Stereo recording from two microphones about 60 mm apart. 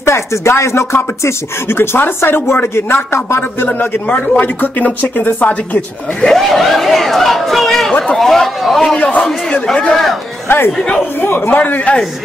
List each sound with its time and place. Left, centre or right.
0.0 s speech: left
3.6 s speech: left
6.2 s speech: centre
8.1 s chatter: centre
10.5 s a man's voice: left